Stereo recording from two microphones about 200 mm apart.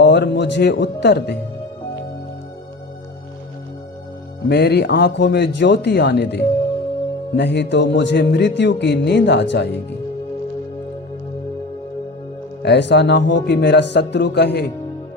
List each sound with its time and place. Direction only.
0.0 s speech: 60° left (ahead or behind)
4.4 s speech: 55° left (ahead or behind)
12.6 s speech: 55° left (ahead or behind)